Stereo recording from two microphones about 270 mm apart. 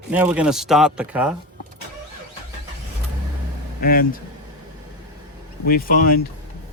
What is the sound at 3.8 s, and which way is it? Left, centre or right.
Speech, left.